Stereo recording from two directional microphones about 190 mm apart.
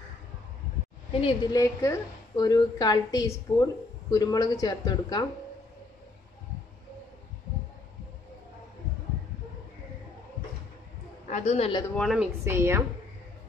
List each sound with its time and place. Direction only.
1.2 s a woman's voice: 20° left (ahead or behind)
11.2 s a woman's voice: 35° left (ahead or behind)
11.9 s a woman's voice: centre (ahead or behind)
12.4 s a woman's voice: 15° right (ahead or behind)